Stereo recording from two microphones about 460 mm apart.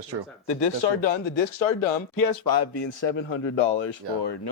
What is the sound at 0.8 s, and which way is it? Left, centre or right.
Speech, left.